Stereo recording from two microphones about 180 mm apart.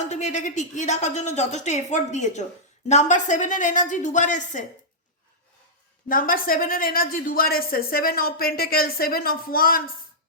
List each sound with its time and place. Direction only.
0.0 s a woman's voice: 40° left (ahead or behind)
6.1 s a woman's voice: 50° left (ahead or behind)